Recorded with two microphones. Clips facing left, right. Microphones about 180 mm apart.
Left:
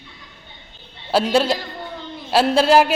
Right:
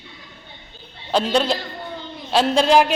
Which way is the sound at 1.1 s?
5° left (ahead or behind).